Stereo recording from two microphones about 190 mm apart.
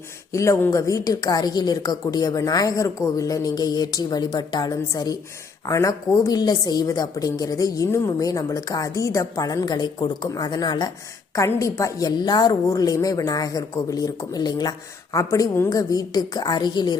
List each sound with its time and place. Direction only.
0.3 s a woman's voice: 15° left (ahead or behind)